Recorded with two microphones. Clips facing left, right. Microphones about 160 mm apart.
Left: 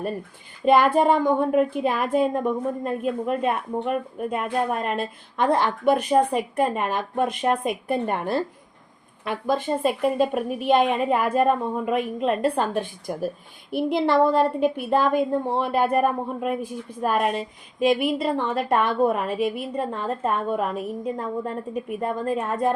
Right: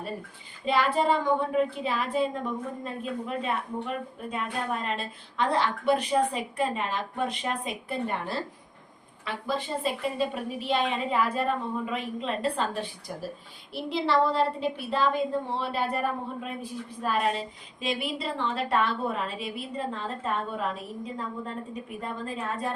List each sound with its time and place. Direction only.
0.6 s a woman's voice: 50° left (ahead or behind)